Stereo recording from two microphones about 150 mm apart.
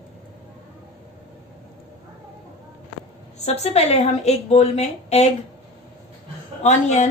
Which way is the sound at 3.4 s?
45° left (ahead or behind).